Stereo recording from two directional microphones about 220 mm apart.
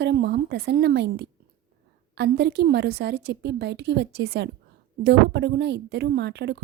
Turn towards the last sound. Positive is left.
turn(degrees=-50)  # may be behind; listen again after turning